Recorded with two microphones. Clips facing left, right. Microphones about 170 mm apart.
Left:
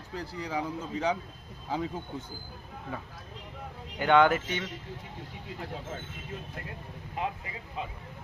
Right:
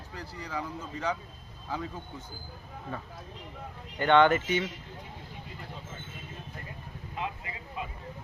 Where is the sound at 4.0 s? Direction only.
5° left (ahead or behind).